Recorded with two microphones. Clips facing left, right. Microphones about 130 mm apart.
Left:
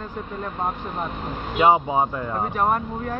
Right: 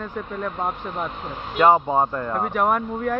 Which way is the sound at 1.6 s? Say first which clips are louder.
Right 1 dB; 10° left (ahead or behind).